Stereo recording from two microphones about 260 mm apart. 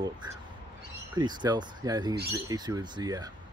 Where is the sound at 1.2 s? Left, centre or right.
Centre.